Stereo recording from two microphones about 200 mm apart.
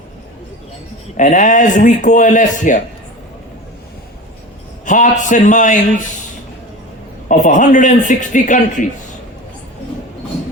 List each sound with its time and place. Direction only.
1.1 s a man's voice: 40° left (ahead or behind)
4.9 s a man's voice: 40° left (ahead or behind)
7.3 s a man's voice: 40° left (ahead or behind)